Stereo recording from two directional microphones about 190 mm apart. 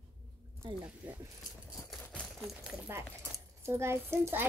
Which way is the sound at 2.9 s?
15° right (ahead or behind).